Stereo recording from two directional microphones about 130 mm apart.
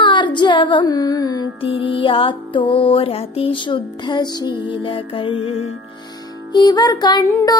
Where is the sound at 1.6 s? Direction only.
45° left (ahead or behind).